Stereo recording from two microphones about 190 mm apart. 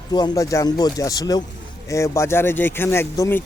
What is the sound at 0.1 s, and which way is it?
Speech, 20° left (ahead or behind).